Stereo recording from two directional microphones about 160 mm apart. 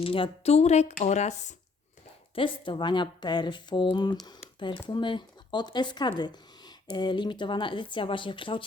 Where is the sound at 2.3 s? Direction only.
30° left (ahead or behind).